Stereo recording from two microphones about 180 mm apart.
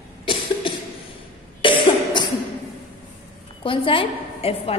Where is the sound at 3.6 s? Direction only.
30° left (ahead or behind).